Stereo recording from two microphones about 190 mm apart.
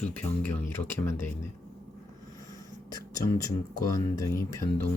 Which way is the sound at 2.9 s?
20° left (ahead or behind).